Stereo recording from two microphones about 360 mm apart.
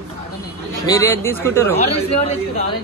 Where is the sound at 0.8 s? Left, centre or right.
Centre.